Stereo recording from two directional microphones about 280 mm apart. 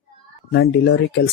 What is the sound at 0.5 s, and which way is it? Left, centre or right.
Speech, left.